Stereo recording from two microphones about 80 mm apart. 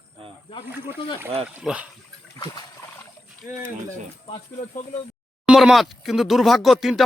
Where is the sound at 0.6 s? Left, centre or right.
Right.